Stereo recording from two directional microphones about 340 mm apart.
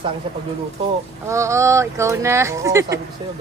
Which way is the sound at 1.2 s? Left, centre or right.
Centre.